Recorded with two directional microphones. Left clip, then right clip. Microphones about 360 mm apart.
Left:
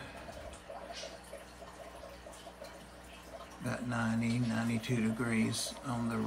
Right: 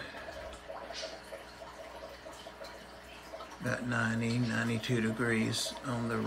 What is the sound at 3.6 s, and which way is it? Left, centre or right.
Speech, centre.